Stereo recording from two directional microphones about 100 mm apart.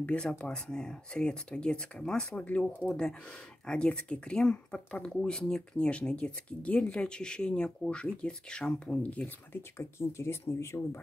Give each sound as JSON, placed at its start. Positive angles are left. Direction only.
{"t": 0.0, "sound": "speech", "side_deg": 10}
{"t": 2.9, "sound": "speech", "side_deg": 5}
{"t": 9.6, "sound": "speech", "side_deg": 25}